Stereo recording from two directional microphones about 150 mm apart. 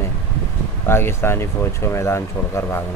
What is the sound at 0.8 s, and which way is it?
Speech, 15° left (ahead or behind).